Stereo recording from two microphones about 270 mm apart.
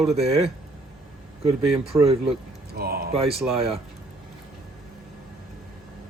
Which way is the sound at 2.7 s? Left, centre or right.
Right.